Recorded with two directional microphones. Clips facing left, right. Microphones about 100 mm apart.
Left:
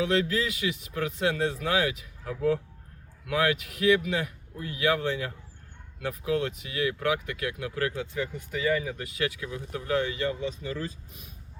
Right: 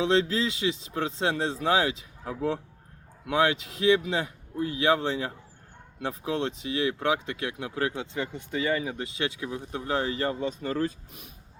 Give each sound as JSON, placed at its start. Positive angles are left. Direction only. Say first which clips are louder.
{"t": 0.0, "sound": "speech", "louder": "right 2 dB", "side_deg": -25}